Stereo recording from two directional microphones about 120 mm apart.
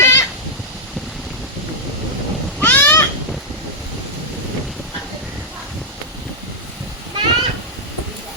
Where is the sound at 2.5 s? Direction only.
15° left (ahead or behind).